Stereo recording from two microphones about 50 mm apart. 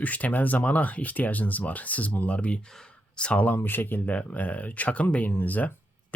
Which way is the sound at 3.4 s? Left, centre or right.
Left.